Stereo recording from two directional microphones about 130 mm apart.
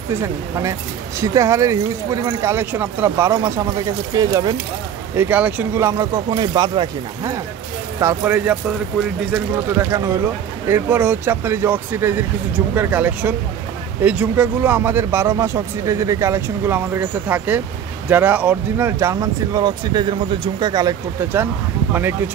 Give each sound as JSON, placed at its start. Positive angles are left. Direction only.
{"t": 0.1, "sound": "speech", "side_deg": -20}
{"t": 5.1, "sound": "speech", "side_deg": -15}
{"t": 8.0, "sound": "speech", "side_deg": -20}
{"t": 9.8, "sound": "speech", "side_deg": -25}